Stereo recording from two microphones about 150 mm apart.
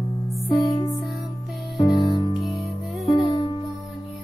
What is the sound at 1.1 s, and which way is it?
Music, centre (ahead or behind).